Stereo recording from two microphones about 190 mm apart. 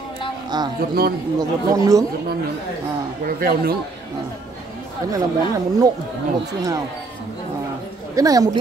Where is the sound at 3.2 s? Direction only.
55° right (ahead or behind).